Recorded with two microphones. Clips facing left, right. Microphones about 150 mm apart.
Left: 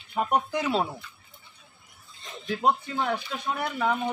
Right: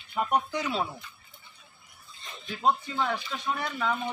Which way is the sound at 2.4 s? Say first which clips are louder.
Left 2 dB; 70° left (ahead or behind).